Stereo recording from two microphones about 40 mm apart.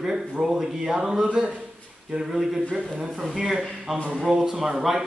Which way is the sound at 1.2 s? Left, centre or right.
Right.